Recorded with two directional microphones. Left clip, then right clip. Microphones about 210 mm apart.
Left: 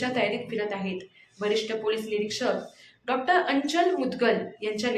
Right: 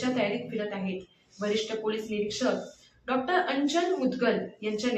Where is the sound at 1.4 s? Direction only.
55° left (ahead or behind).